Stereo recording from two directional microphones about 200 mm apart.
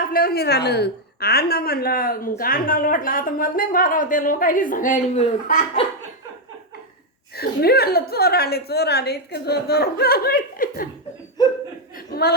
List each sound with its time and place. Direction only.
0.1 s a woman's voice: 50° left (ahead or behind)
7.3 s a woman's voice: 50° left (ahead or behind)
11.9 s speech: 50° left (ahead or behind)